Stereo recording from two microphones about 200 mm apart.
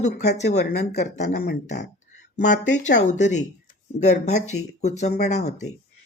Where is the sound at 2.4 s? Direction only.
40° left (ahead or behind).